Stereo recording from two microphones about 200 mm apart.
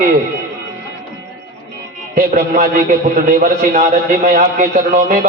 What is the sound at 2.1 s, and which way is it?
A man's voice, 40° right (ahead or behind).